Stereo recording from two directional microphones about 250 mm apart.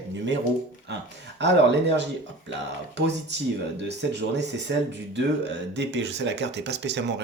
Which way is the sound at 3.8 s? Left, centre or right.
Right.